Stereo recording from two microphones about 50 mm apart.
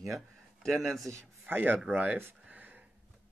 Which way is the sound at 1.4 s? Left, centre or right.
Right.